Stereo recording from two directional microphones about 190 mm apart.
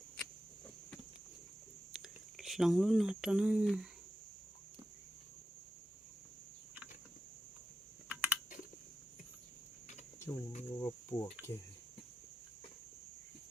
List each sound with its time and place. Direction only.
1.9 s speech: centre (ahead or behind)
8.1 s typing: 10° right (ahead or behind)
10.3 s speech: 20° left (ahead or behind)
10.8 s cricket: 15° left (ahead or behind)